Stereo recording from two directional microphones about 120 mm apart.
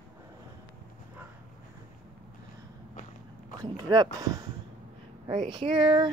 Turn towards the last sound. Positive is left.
turn(degrees=-40)  # may be behind; listen again after turning